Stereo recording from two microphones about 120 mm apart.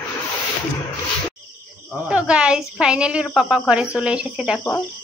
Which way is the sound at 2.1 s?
10° right (ahead or behind).